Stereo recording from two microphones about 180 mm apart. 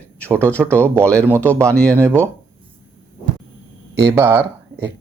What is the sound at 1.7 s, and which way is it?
Speech, 5° left (ahead or behind).